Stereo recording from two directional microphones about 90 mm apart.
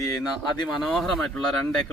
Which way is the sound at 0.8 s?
Centre (ahead or behind).